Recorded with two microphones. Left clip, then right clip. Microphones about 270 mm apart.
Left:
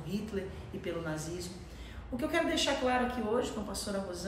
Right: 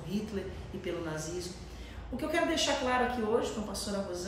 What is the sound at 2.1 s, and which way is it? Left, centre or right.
A woman's voice, centre.